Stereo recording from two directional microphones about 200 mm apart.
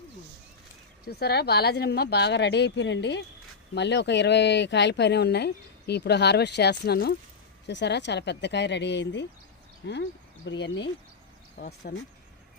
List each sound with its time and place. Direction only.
1.0 s speech: 55° left (ahead or behind)
11.5 s speech: 50° left (ahead or behind)